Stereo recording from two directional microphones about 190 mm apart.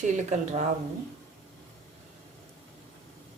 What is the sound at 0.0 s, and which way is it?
Speech, 40° right (ahead or behind).